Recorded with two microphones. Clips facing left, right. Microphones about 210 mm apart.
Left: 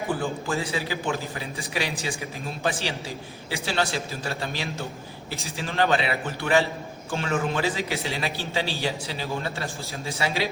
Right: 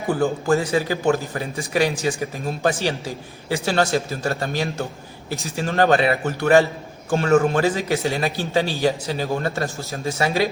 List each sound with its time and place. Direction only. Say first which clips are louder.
0.1 s a man's voice: right 10 dB; 45° right (ahead or behind)